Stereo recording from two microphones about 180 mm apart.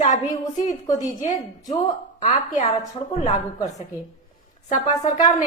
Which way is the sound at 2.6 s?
25° left (ahead or behind).